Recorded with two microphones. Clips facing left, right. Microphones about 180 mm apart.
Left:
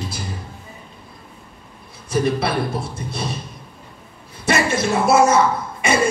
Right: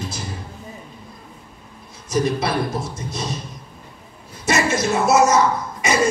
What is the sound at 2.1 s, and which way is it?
A man's voice, 60° left (ahead or behind).